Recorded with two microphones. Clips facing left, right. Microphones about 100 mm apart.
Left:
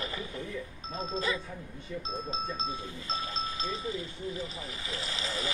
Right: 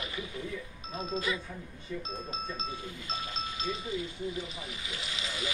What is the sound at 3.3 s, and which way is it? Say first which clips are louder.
Speech: left 1 dB; 35° left (ahead or behind).